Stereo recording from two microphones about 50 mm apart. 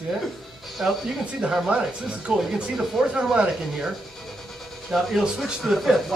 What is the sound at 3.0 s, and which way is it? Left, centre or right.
Speech, centre.